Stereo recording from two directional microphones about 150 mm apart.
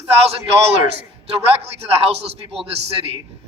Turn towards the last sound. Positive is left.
turn(degrees=-40)  # may be behind; listen again after turning